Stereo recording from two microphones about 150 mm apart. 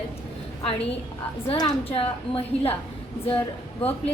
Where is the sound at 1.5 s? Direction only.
40° left (ahead or behind).